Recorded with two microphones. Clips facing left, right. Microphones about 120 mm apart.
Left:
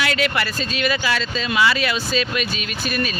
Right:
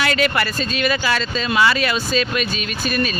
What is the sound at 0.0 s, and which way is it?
Speech, 45° right (ahead or behind).